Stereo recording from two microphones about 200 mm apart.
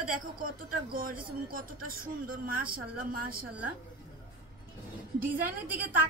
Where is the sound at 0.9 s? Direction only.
45° right (ahead or behind).